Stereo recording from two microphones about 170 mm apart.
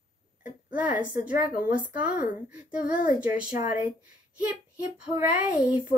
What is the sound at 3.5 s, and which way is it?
Speech, 55° left (ahead or behind).